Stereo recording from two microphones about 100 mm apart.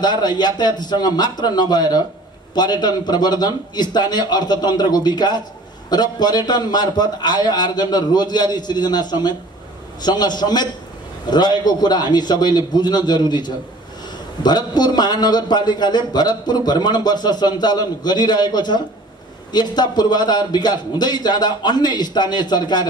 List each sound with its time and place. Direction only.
0.0 s a man's voice: 45° left (ahead or behind)
14.4 s a man's voice: 45° left (ahead or behind)